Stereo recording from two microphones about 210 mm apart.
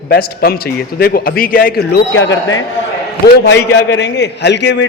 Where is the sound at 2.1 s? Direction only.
60° left (ahead or behind).